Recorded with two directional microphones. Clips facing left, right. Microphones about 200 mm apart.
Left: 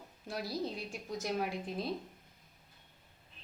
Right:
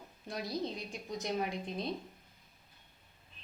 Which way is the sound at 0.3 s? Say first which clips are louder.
Even; 5° left (ahead or behind).